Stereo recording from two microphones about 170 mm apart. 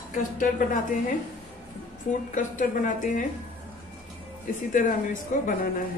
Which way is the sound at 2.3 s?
50° left (ahead or behind).